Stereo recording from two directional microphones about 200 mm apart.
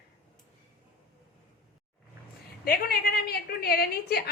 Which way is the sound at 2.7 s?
50° left (ahead or behind).